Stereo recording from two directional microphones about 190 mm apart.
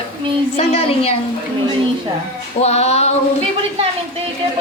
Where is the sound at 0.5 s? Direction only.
30° left (ahead or behind).